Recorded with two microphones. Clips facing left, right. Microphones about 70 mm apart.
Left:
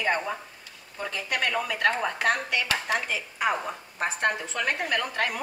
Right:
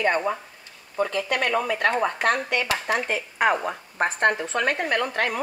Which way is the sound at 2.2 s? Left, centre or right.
Right.